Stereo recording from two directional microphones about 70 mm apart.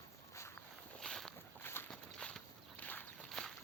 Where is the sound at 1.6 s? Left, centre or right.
Left.